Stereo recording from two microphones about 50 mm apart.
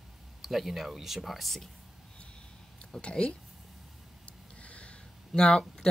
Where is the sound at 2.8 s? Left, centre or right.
Centre.